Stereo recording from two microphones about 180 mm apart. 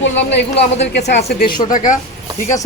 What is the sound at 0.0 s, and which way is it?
A woman's voice, 75° left (ahead or behind).